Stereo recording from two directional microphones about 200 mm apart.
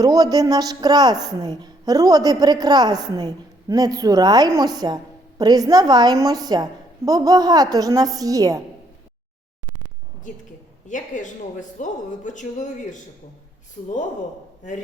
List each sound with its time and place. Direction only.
0.0 s a woman's voice: 20° right (ahead or behind)
10.8 s speech: 40° left (ahead or behind)